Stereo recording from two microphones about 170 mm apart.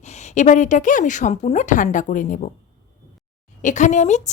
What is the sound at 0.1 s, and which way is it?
A woman's voice, 45° left (ahead or behind).